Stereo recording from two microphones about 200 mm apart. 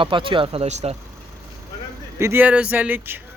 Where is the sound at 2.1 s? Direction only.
10° right (ahead or behind).